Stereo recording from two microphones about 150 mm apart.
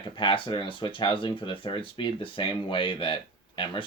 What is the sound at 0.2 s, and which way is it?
Speech, 35° left (ahead or behind).